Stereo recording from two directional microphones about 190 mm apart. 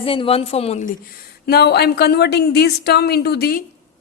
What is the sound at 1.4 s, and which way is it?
Speech, 55° left (ahead or behind).